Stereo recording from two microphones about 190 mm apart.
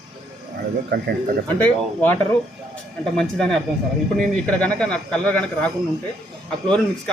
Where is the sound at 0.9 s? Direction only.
60° right (ahead or behind).